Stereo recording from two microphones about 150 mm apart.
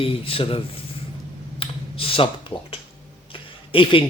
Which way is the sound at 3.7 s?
35° left (ahead or behind).